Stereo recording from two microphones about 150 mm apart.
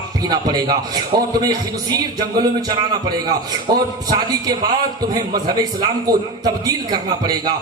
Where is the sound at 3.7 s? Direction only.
25° right (ahead or behind).